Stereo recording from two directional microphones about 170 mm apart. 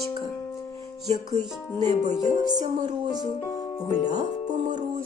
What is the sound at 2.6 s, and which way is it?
Music, 45° right (ahead or behind).